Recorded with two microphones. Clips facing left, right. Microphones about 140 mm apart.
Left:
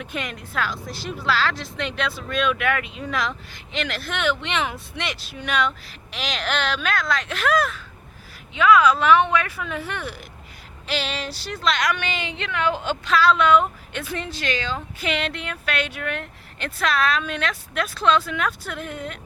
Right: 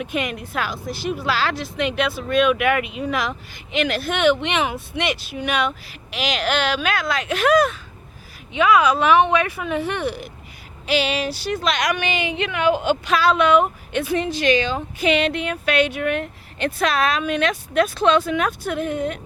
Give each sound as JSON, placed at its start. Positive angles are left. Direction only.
{"t": 0.0, "sound": "speech", "side_deg": -15}